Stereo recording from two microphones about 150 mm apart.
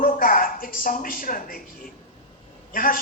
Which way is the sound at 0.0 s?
70° left (ahead or behind).